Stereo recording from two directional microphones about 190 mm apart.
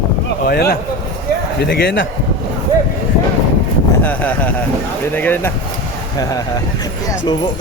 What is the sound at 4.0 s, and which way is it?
Speech, 10° left (ahead or behind).